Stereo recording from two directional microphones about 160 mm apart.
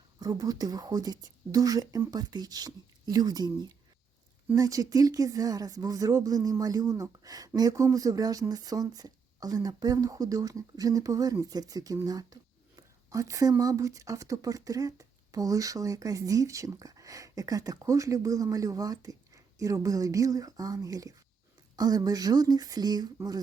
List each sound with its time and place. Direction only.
0.2 s speech: 25° right (ahead or behind)